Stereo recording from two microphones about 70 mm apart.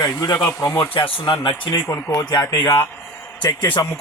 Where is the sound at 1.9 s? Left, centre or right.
Left.